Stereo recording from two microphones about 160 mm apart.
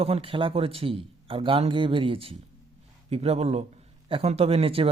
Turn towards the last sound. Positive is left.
turn(degrees=-35)  # may be behind; listen again after turning